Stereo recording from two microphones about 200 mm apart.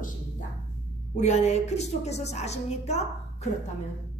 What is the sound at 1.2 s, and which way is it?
A woman's voice, 35° left (ahead or behind).